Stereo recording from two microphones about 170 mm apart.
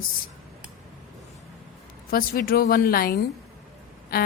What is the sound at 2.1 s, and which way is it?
A woman's voice, 60° left (ahead or behind).